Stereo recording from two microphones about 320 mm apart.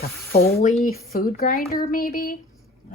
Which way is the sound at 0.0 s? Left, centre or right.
Left.